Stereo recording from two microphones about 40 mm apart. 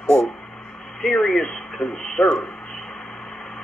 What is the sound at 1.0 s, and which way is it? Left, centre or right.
Speech, centre.